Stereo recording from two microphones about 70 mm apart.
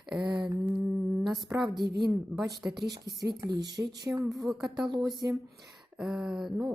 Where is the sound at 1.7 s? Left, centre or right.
Right.